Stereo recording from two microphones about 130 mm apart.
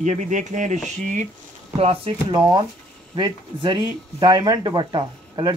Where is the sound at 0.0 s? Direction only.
70° right (ahead or behind).